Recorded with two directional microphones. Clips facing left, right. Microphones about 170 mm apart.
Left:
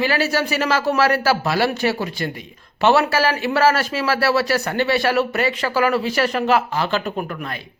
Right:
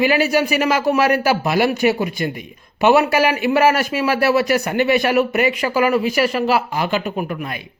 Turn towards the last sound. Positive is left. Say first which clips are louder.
# right 2 dB
turn(degrees=-15)  # may be behind; listen again after turning